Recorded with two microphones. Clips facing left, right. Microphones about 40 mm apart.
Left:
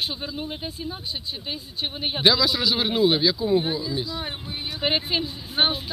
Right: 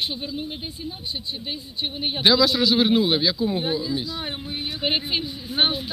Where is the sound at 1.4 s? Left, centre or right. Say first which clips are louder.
Even; centre.